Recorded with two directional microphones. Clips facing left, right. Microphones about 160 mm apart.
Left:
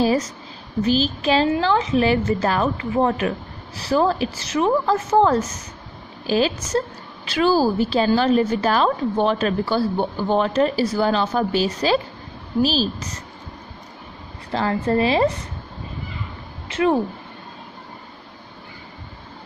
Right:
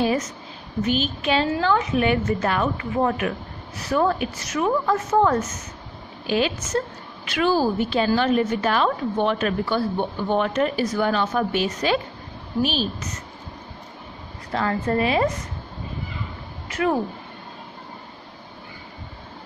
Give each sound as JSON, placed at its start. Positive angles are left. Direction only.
{"t": 0.0, "sound": "a sound", "side_deg": 35}
{"t": 0.8, "sound": "a woman's voice", "side_deg": 35}
{"t": 14.5, "sound": "a woman's voice", "side_deg": 30}
{"t": 16.6, "sound": "speech", "side_deg": 25}